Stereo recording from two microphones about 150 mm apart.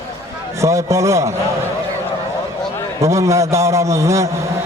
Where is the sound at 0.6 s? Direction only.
20° right (ahead or behind).